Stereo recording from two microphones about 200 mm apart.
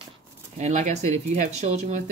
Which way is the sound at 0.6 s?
35° right (ahead or behind).